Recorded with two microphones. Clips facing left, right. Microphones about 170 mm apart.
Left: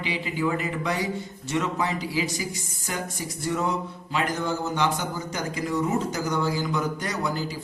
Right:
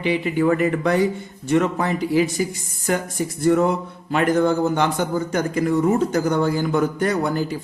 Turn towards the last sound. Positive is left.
turn(degrees=-55)  # may be behind; listen again after turning